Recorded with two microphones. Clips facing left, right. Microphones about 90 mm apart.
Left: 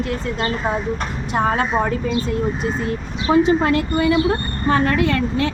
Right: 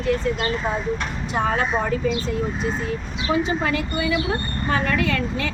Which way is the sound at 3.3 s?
50° left (ahead or behind).